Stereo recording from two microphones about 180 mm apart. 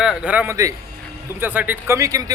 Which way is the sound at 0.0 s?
5° right (ahead or behind).